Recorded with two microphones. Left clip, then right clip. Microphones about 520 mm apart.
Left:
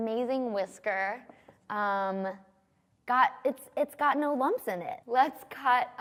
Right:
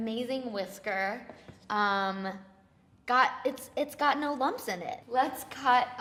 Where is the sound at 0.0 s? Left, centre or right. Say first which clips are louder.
Left 4 dB; left.